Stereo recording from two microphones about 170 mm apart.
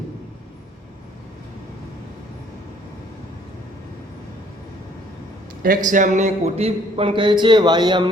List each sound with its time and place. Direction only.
5.6 s speech: 50° right (ahead or behind); by 8.1 s 25° right (ahead or behind)